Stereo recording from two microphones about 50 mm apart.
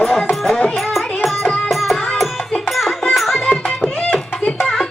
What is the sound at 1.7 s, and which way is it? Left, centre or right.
Music, centre.